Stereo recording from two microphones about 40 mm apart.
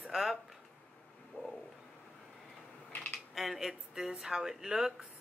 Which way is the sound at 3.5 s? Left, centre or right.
Centre.